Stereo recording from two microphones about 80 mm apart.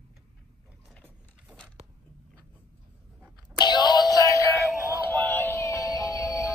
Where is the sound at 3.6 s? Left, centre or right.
Left.